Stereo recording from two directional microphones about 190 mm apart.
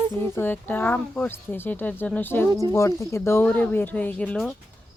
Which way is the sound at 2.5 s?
20° right (ahead or behind).